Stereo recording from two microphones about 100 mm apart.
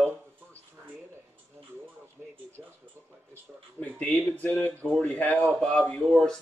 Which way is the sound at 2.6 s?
15° right (ahead or behind).